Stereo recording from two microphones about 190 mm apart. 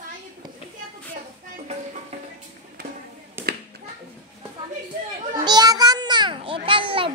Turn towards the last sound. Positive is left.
turn(degrees=-25)  # may be behind; listen again after turning